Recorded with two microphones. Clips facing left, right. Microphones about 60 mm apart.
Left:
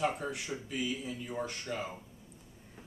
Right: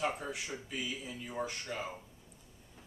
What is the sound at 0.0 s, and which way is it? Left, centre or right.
Speech, centre.